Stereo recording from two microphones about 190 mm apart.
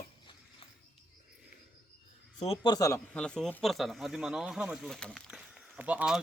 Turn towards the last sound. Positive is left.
turn(degrees=-5)  # may be behind; listen again after turning